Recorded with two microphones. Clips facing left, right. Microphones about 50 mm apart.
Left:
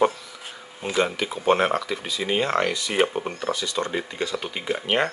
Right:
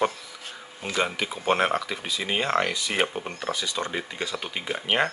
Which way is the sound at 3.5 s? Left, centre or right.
Centre.